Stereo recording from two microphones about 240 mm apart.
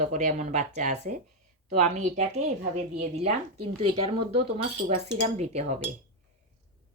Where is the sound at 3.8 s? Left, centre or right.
Right.